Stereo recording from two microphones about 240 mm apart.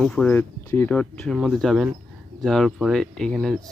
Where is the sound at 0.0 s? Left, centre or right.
Centre.